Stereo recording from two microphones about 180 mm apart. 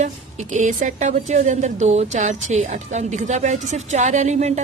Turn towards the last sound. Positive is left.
turn(degrees=-40)  # may be behind; listen again after turning